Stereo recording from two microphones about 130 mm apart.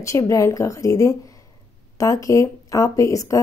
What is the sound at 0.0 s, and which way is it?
Speech, 25° left (ahead or behind).